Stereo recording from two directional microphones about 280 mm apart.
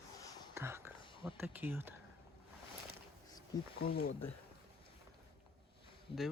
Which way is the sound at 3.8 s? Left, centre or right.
Left.